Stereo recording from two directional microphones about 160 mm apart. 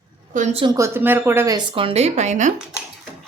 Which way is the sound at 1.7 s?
35° right (ahead or behind).